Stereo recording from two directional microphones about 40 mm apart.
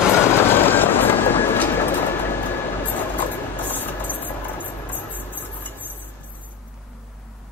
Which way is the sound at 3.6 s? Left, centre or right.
Left.